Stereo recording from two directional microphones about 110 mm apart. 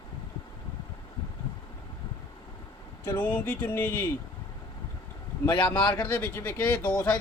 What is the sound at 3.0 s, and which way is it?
Speech, 15° left (ahead or behind).